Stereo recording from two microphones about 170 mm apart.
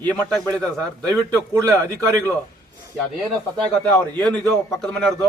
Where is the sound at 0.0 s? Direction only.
5° left (ahead or behind).